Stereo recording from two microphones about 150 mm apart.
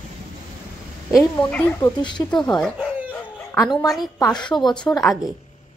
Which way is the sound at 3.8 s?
Centre (ahead or behind).